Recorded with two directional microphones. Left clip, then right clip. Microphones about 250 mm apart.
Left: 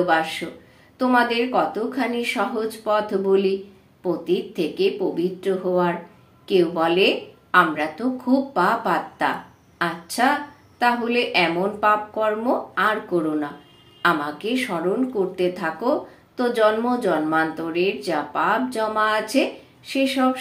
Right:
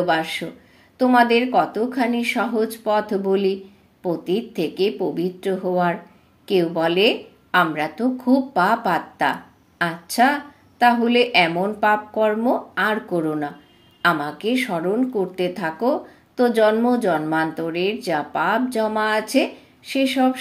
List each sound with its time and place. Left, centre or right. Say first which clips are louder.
0.0 s a woman's voice: even; right